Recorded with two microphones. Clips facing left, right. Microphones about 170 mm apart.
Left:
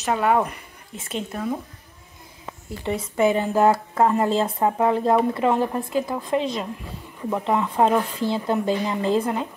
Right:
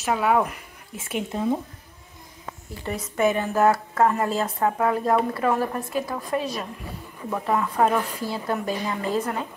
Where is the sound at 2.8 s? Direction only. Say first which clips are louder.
Left 2 dB; 25° left (ahead or behind).